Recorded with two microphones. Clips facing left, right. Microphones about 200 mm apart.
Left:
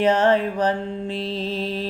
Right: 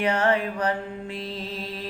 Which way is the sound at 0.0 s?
25° left (ahead or behind).